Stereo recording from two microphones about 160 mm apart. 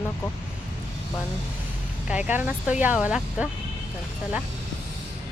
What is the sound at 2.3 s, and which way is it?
Speech, 10° right (ahead or behind).